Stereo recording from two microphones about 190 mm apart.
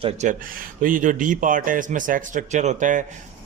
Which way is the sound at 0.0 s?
40° right (ahead or behind).